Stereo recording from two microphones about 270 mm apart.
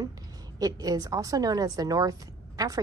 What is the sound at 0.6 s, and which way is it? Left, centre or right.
A woman's voice, centre.